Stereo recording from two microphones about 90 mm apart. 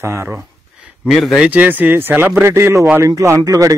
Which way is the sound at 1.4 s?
15° right (ahead or behind).